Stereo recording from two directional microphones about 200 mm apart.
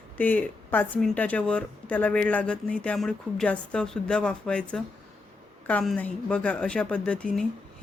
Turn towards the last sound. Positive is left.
turn(degrees=5)  # may be behind; listen again after turning